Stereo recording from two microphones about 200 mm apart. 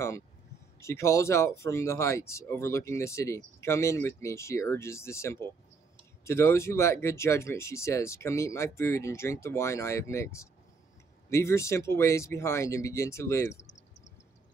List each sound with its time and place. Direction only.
0.7 s speech: 15° left (ahead or behind)